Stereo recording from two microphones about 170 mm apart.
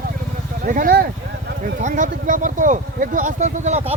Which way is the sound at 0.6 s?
50° right (ahead or behind).